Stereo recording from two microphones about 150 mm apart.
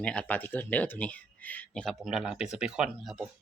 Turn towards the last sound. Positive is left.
turn(degrees=0)  # may be behind; listen again after turning